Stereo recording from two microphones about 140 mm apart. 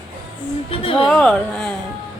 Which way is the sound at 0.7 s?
40° left (ahead or behind).